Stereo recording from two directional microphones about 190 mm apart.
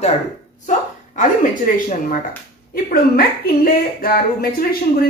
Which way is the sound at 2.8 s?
50° left (ahead or behind).